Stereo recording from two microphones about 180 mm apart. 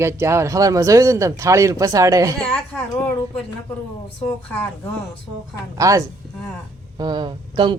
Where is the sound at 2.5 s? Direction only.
10° left (ahead or behind).